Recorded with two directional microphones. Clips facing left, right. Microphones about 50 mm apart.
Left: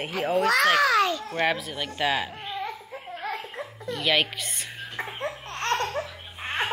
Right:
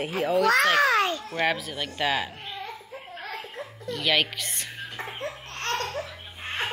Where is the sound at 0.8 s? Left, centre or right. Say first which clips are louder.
Left 1 dB; right.